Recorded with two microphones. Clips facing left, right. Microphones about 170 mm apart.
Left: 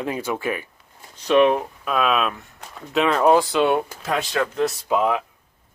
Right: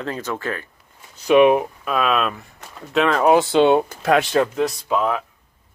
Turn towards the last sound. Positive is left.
turn(degrees=10)  # may be behind; listen again after turning